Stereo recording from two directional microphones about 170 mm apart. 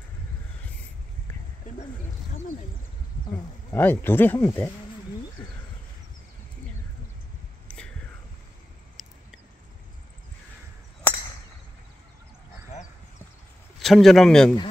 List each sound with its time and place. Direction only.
1.6 s a sound: 50° left (ahead or behind)
3.7 s speech: 10° left (ahead or behind)
7.6 s whispering: 5° left (ahead or behind)
9.0 s mouse: centre (ahead or behind)
13.7 s speech: centre (ahead or behind)